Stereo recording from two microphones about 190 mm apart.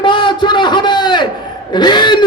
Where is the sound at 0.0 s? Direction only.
25° left (ahead or behind).